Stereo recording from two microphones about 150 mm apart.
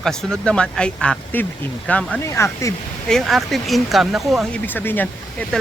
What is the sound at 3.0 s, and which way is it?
Speech, centre (ahead or behind).